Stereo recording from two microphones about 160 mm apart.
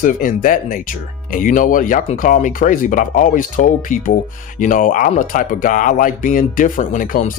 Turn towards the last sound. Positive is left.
turn(degrees=55)  # may be behind; listen again after turning